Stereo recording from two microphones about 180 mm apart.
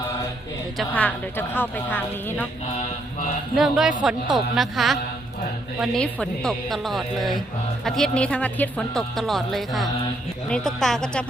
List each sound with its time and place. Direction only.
0.8 s a woman's voice: 10° left (ahead or behind)
2.7 s mantra: 45° left (ahead or behind)
3.5 s speech: centre (ahead or behind)